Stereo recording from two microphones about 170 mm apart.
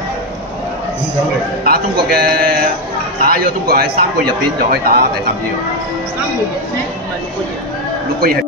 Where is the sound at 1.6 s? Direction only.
60° right (ahead or behind).